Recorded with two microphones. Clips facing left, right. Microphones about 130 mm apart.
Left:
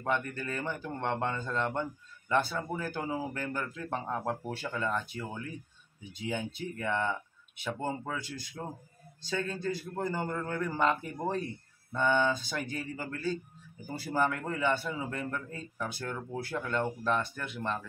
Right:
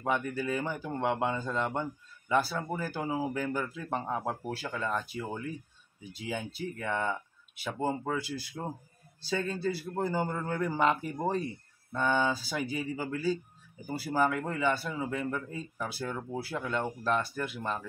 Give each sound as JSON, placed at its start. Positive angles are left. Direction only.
{"t": 0.0, "sound": "a man's voice", "side_deg": -5}